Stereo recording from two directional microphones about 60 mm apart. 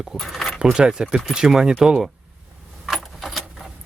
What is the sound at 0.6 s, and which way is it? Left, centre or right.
Speech, centre.